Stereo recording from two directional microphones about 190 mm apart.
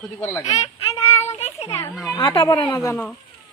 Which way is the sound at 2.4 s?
25° left (ahead or behind).